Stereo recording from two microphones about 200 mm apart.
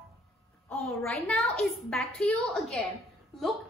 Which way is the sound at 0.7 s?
Centre (ahead or behind).